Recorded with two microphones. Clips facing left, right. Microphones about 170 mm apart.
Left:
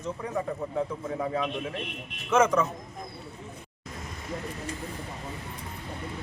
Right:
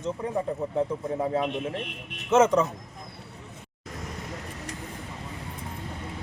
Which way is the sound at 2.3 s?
25° right (ahead or behind).